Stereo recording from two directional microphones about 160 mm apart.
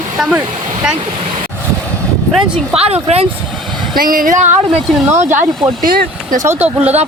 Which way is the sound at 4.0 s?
60° right (ahead or behind).